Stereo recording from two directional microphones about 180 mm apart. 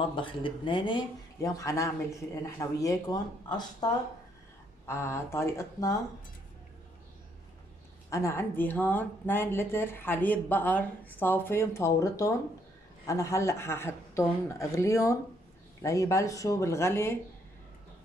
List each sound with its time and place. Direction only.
0.1 s speech: 30° left (ahead or behind)
8.1 s speech: 15° left (ahead or behind)